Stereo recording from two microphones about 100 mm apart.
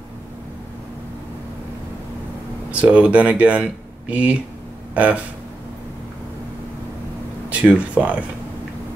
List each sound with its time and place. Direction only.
2.7 s speech: 10° right (ahead or behind)
7.4 s speech: 15° right (ahead or behind)